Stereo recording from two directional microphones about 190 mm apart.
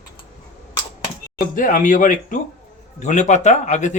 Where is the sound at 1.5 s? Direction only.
45° left (ahead or behind).